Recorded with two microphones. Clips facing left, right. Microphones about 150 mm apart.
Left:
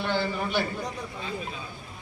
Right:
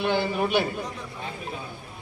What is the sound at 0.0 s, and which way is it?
Speech, 15° right (ahead or behind).